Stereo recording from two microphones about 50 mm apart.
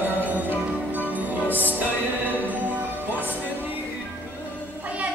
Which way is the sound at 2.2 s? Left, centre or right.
Right.